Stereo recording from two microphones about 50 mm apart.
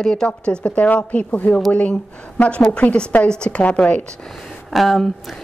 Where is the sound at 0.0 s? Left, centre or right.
Centre.